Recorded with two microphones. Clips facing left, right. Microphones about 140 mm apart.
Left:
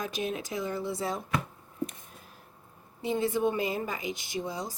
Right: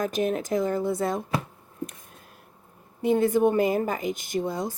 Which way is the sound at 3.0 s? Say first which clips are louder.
Right 7 dB; 50° right (ahead or behind).